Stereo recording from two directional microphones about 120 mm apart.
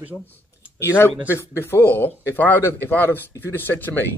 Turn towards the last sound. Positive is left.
turn(degrees=15)  # may be behind; listen again after turning